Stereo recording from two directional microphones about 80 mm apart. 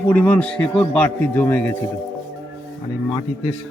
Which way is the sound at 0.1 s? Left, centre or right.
Centre.